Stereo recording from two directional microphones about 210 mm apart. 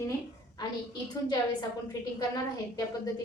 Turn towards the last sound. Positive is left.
turn(degrees=15)  # may be behind; listen again after turning